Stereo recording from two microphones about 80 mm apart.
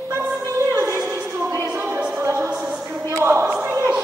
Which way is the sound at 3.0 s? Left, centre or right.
Right.